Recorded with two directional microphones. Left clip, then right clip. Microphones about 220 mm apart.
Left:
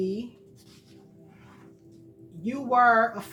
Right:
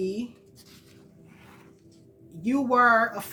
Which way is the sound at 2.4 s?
55° right (ahead or behind).